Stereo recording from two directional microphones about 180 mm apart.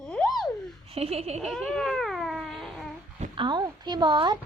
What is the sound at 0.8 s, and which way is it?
Speech, 35° right (ahead or behind).